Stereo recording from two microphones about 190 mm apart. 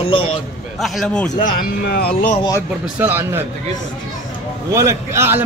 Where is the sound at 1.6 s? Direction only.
55° left (ahead or behind).